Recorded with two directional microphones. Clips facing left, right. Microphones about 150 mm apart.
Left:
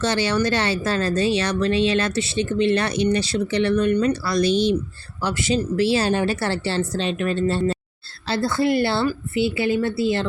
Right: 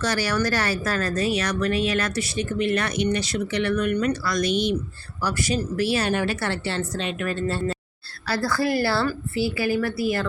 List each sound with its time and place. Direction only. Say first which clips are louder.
0.0 s speech: left 3 dB; 25° left (ahead or behind)